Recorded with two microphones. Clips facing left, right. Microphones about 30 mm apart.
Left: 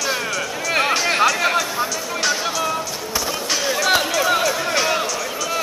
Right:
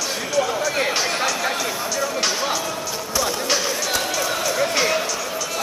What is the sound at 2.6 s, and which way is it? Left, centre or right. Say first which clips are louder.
Basketball bounce: left 3 dB; centre.